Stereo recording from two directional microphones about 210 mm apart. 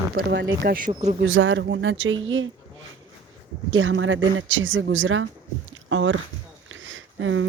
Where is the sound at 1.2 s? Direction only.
65° right (ahead or behind).